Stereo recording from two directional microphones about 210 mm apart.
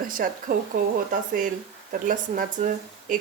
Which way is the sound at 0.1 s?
40° right (ahead or behind).